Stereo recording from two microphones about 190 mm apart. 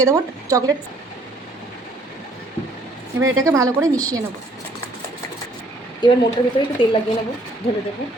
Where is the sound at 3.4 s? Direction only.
15° right (ahead or behind).